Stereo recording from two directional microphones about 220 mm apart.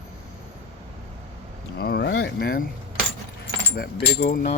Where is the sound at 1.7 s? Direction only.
45° left (ahead or behind).